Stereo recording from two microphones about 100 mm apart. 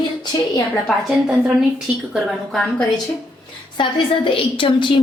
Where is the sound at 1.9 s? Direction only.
10° right (ahead or behind).